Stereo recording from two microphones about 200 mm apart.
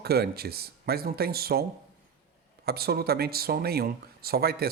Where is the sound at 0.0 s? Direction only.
50° right (ahead or behind).